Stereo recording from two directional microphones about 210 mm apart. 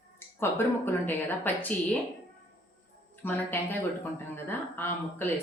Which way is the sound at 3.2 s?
10° left (ahead or behind).